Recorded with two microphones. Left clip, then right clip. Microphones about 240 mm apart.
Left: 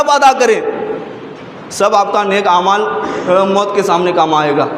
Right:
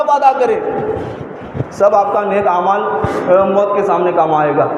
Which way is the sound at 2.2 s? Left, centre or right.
Left.